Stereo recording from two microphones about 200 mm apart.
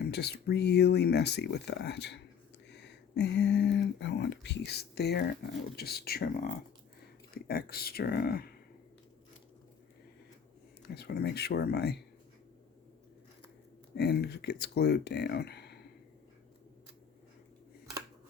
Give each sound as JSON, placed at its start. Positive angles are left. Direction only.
{"t": 0.0, "sound": "speech", "side_deg": 55}
{"t": 10.8, "sound": "speech", "side_deg": 55}
{"t": 13.9, "sound": "speech", "side_deg": 55}